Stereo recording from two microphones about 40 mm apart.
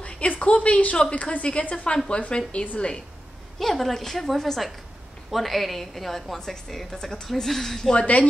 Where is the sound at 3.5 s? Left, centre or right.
Centre.